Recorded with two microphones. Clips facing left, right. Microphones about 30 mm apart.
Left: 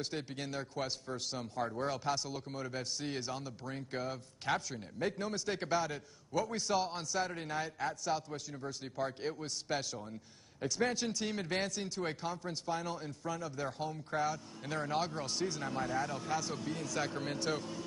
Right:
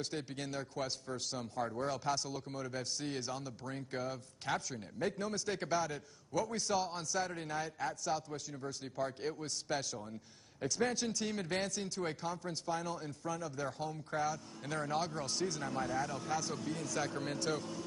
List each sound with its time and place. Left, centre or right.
0.0 s a man's voice: centre